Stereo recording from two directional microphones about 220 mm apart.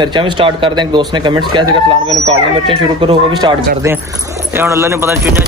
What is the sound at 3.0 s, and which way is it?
A man's voice, 20° right (ahead or behind).